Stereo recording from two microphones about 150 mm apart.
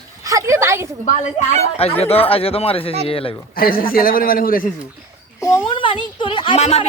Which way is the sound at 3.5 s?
75° left (ahead or behind).